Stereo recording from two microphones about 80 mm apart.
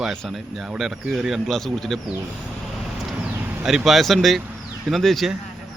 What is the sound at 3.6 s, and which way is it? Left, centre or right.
Speech, centre.